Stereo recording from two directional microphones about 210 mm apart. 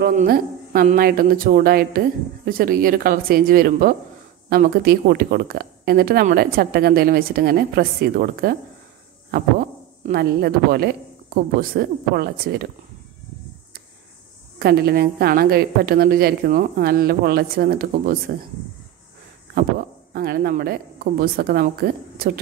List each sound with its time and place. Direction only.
0.0 s speech: 40° right (ahead or behind)
14.6 s speech: 50° right (ahead or behind)
20.1 s speech: 45° right (ahead or behind)